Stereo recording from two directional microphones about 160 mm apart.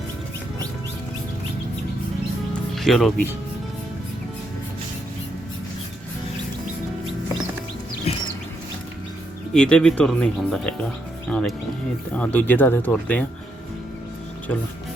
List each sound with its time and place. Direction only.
2.5 s music: centre (ahead or behind)
8.1 s chicken: 40° left (ahead or behind)
9.5 s speech: 5° left (ahead or behind)